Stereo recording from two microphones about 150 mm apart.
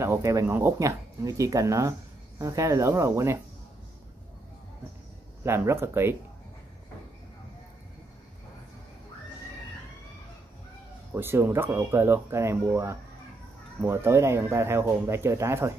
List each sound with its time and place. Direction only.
0.0 s speech: 20° right (ahead or behind)
5.4 s speech: 15° right (ahead or behind)
11.1 s speech: 15° right (ahead or behind)